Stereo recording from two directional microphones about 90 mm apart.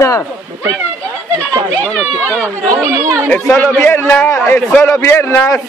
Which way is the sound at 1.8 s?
5° left (ahead or behind).